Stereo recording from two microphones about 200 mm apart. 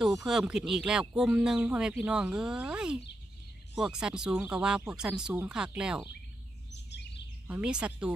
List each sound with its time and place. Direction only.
0.2 s speech: centre (ahead or behind)
6.7 s bird vocalization: 55° left (ahead or behind)
7.4 s speech: 5° right (ahead or behind)